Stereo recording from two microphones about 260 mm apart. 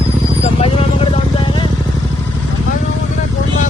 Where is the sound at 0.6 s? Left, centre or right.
Left.